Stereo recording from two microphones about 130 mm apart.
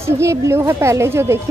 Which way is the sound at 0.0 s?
20° right (ahead or behind).